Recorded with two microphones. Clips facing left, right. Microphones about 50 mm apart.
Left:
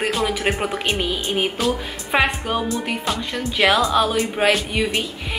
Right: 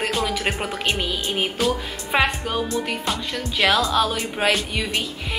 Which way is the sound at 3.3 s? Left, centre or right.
Centre.